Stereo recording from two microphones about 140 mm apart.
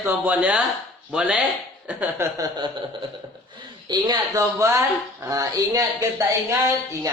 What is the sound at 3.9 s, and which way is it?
Speech, 30° right (ahead or behind).